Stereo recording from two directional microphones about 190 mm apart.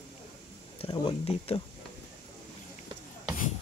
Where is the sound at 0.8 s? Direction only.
25° left (ahead or behind).